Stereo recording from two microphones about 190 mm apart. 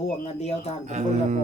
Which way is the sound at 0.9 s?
40° right (ahead or behind).